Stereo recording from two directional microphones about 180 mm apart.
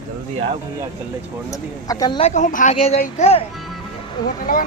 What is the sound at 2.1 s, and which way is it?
Speech, 40° left (ahead or behind).